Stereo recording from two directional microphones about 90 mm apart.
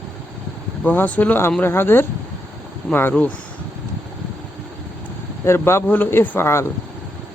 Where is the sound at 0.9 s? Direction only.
15° left (ahead or behind).